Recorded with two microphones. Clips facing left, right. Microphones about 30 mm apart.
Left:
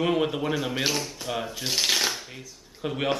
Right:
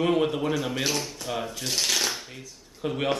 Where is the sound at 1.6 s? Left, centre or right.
Centre.